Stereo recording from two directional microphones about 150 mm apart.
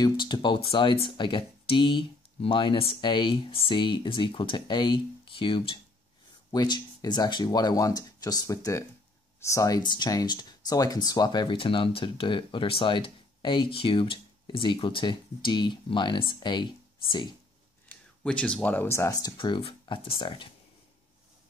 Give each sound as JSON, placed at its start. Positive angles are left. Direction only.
{"t": 0.0, "sound": "speech", "side_deg": 30}
{"t": 17.8, "sound": "speech", "side_deg": 10}